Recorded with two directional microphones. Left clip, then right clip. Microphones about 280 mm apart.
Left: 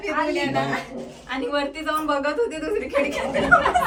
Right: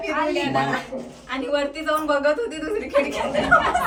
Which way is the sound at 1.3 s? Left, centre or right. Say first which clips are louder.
Right 1 dB; centre.